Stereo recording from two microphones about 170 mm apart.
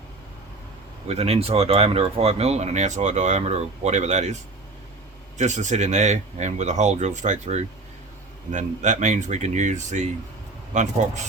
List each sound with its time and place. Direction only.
1.0 s speech: 40° right (ahead or behind)
5.4 s speech: 45° right (ahead or behind)